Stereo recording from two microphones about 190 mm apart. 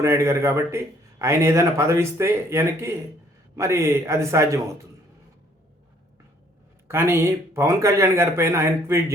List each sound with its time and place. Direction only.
0.0 s a man's voice: 15° right (ahead or behind)
6.8 s a man's voice: 15° right (ahead or behind)